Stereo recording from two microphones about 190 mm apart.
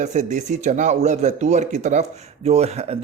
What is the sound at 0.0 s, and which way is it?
Speech, 40° right (ahead or behind).